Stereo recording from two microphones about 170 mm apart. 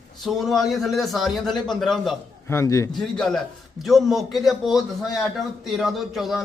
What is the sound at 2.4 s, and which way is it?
Speech, 15° left (ahead or behind).